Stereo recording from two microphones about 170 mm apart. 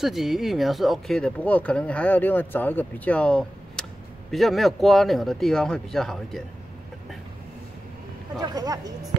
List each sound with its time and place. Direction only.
0.0 s speech: centre (ahead or behind)
8.4 s speech: 20° right (ahead or behind)